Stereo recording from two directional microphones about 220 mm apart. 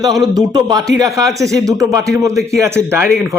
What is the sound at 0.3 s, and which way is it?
Speech, 20° right (ahead or behind).